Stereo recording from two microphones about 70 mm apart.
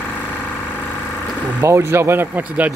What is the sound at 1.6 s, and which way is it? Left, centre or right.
Speech, right.